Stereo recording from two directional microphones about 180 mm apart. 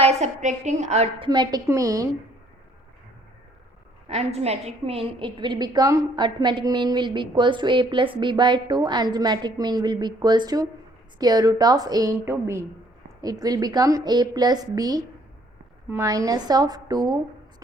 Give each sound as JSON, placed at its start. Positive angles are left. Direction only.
{"t": 0.0, "sound": "a woman's voice", "side_deg": -40}
{"t": 1.3, "sound": "a woman's voice", "side_deg": -25}
{"t": 4.1, "sound": "a woman's voice", "side_deg": -35}